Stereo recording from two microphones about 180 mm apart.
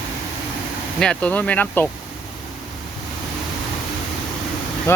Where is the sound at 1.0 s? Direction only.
5° left (ahead or behind).